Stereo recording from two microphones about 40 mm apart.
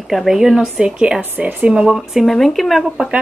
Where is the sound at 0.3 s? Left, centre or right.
Centre.